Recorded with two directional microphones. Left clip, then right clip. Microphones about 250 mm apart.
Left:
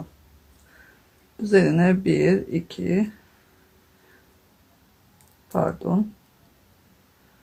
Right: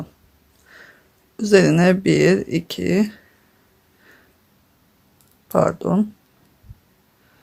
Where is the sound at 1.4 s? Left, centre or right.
Right.